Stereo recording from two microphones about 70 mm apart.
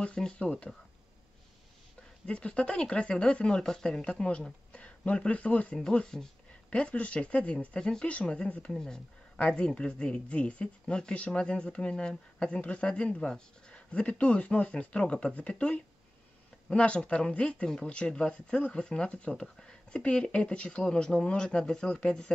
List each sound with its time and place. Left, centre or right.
0.0 s speech: centre
2.2 s speech: centre